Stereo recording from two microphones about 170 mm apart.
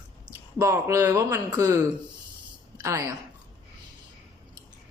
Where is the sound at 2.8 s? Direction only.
20° right (ahead or behind).